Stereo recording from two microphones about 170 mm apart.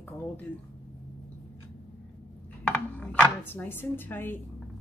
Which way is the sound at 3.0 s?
10° left (ahead or behind).